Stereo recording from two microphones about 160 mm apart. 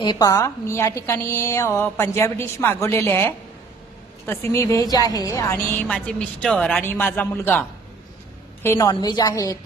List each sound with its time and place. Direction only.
0.0 s a woman's voice: 25° left (ahead or behind)
8.6 s a woman's voice: 20° left (ahead or behind)